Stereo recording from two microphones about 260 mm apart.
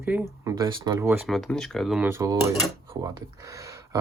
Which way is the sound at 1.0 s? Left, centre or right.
Centre.